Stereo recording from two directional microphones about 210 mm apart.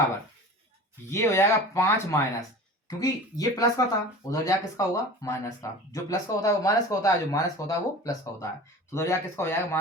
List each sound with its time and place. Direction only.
1.0 s speech: 15° left (ahead or behind)